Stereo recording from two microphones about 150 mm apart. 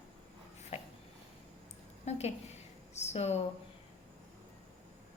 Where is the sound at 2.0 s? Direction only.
45° left (ahead or behind).